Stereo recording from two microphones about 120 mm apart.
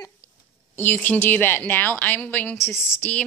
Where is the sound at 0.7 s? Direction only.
15° left (ahead or behind).